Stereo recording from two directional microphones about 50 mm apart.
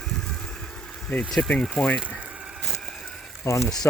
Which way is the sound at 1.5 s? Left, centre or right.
Centre.